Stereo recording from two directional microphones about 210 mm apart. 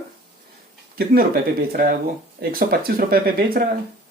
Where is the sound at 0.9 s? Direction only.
45° right (ahead or behind).